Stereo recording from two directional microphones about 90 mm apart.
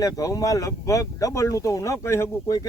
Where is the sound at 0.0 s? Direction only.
40° left (ahead or behind).